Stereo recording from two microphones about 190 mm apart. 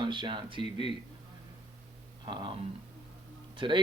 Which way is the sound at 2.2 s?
25° right (ahead or behind).